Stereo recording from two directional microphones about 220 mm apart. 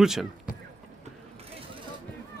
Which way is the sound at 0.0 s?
Centre (ahead or behind).